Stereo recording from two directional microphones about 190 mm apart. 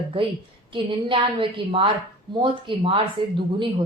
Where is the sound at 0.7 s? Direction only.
25° right (ahead or behind).